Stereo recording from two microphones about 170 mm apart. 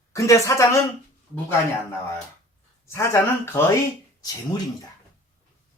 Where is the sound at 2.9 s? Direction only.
15° left (ahead or behind).